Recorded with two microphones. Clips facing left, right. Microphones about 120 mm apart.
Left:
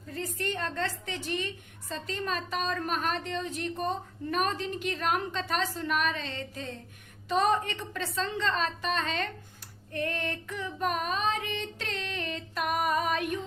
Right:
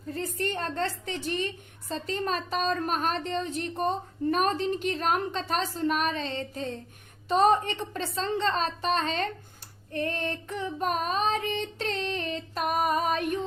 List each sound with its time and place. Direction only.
0.1 s child singing: 35° right (ahead or behind)